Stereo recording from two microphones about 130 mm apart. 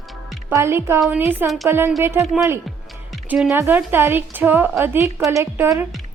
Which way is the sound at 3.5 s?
20° right (ahead or behind).